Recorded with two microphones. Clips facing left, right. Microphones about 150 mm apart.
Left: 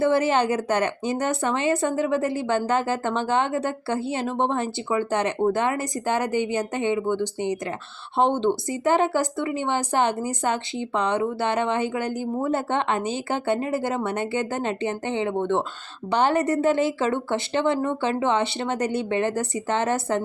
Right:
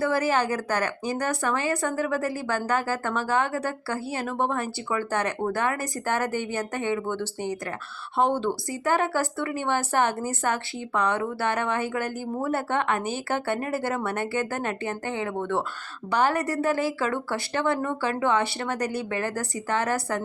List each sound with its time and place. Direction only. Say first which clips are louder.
0.0 s speech: left 4 dB; 25° left (ahead or behind)